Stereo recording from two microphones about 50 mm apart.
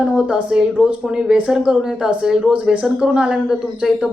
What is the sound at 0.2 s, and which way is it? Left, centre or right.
Speech, right.